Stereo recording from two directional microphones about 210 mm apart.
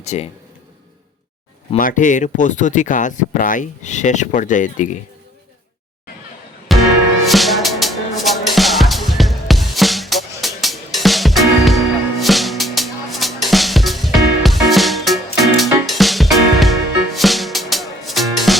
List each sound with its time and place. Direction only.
0.0 s speech: 30° left (ahead or behind)
1.7 s speech: 40° left (ahead or behind)
6.7 s music: centre (ahead or behind)